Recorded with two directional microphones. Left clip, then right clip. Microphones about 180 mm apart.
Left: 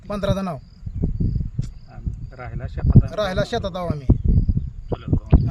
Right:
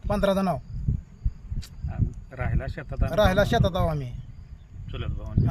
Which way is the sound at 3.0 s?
10° left (ahead or behind).